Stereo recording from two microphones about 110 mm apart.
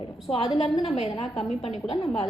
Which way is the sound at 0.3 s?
65° left (ahead or behind).